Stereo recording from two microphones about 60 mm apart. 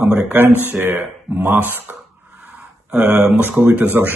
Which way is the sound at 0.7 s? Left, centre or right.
Right.